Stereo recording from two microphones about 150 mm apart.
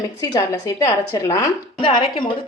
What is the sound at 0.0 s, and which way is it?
Speech, 25° left (ahead or behind).